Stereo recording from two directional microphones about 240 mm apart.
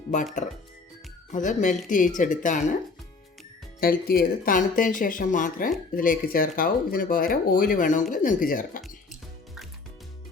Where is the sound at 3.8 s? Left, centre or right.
Left.